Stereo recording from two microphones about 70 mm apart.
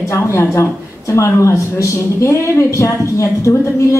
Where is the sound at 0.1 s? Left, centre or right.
Left.